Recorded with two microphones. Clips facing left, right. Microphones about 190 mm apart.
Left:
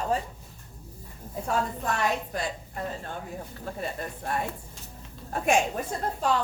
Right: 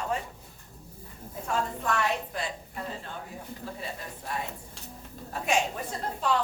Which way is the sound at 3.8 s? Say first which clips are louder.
Left 5 dB; 50° left (ahead or behind).